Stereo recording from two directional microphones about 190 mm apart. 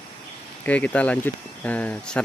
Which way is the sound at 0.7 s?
5° left (ahead or behind).